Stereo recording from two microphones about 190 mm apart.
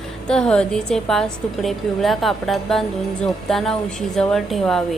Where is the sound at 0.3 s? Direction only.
5° left (ahead or behind).